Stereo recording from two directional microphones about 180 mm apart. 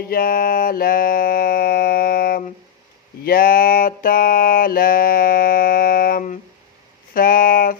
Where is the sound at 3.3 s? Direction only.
50° left (ahead or behind).